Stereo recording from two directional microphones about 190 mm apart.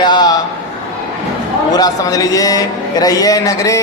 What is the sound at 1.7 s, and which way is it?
A man's voice, 20° left (ahead or behind).